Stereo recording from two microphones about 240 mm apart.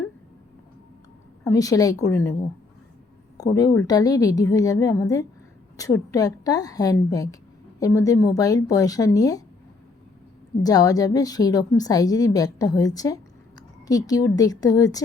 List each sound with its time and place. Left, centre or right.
1.5 s a woman's voice: centre
3.3 s a woman's voice: centre
10.6 s a woman's voice: centre
13.6 s a sound: centre
14.3 s a woman's voice: centre